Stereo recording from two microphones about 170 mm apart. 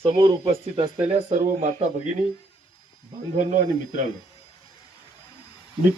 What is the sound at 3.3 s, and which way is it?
Speech, 50° right (ahead or behind).